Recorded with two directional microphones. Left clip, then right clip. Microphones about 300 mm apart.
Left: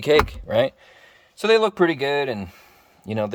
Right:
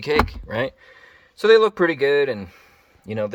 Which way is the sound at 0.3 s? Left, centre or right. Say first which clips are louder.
Left 5 dB; centre.